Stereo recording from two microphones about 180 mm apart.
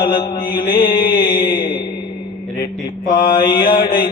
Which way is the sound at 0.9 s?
55° left (ahead or behind).